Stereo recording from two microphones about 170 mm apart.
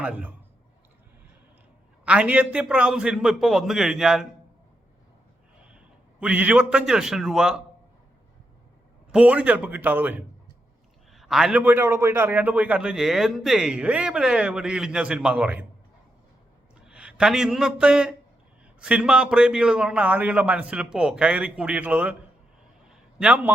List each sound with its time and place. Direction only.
0.0 s a man's voice: 10° right (ahead or behind)
2.0 s a man's voice: 10° right (ahead or behind)
5.6 s a man's voice: 5° right (ahead or behind)
9.1 s a man's voice: 10° right (ahead or behind)
16.8 s a man's voice: 5° right (ahead or behind)
22.9 s a sound: 5° right (ahead or behind)